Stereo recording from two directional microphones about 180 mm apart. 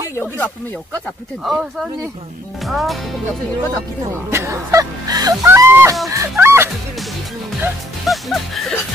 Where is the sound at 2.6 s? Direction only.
Centre (ahead or behind).